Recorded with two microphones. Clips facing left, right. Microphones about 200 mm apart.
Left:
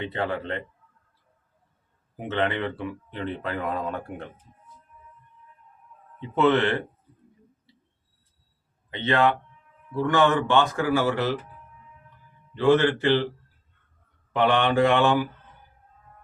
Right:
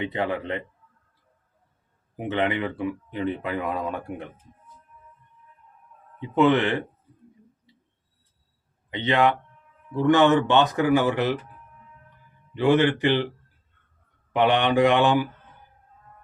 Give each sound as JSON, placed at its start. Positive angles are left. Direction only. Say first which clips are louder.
{"t": 0.0, "sound": "speech", "louder": "right 2 dB", "side_deg": -15}
{"t": 2.1, "sound": "speech", "louder": "right 1 dB", "side_deg": -15}
{"t": 6.1, "sound": "speech", "louder": "right 1 dB", "side_deg": -15}
{"t": 8.9, "sound": "speech", "louder": "right 1 dB", "side_deg": -15}
{"t": 12.5, "sound": "speech", "louder": "even", "side_deg": -15}
{"t": 14.3, "sound": "speech", "louder": "right 1 dB", "side_deg": -15}